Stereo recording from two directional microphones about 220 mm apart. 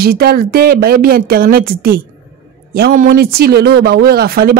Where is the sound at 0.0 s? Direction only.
45° right (ahead or behind).